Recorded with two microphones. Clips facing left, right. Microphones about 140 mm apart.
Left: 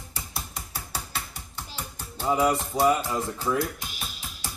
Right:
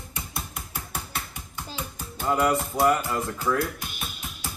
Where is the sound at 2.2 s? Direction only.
10° left (ahead or behind).